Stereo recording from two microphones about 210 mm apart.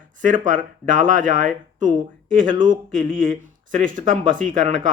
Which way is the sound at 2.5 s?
20° right (ahead or behind).